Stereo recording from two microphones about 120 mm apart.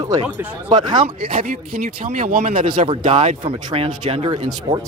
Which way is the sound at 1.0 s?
50° right (ahead or behind).